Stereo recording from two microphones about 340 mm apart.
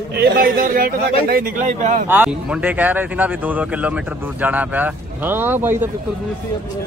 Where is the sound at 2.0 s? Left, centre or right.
Centre.